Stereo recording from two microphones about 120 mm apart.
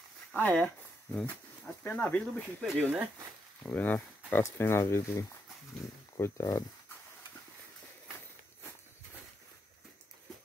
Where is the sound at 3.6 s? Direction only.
15° left (ahead or behind).